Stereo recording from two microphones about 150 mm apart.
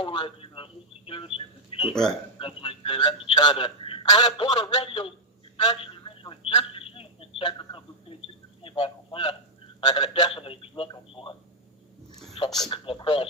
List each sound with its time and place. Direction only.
0.0 s speech: 35° left (ahead or behind)
1.9 s a man's voice: 5° left (ahead or behind)
2.4 s speech: 35° left (ahead or behind)
5.6 s telephone: 35° left (ahead or behind)
8.6 s a man's voice: 35° left (ahead or behind)
12.6 s speech: 35° left (ahead or behind)